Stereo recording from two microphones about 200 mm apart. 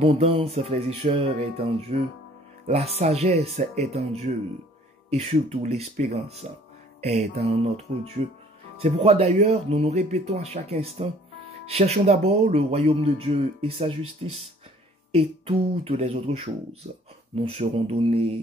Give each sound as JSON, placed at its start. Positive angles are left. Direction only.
{"t": 0.0, "sound": "speech", "side_deg": -30}